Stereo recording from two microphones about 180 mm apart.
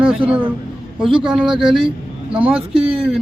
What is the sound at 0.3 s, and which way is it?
Speech, 10° right (ahead or behind).